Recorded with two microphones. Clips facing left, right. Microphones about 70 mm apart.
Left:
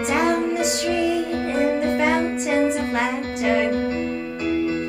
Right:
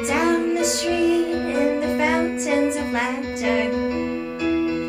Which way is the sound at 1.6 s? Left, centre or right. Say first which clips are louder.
Left 2 dB; left.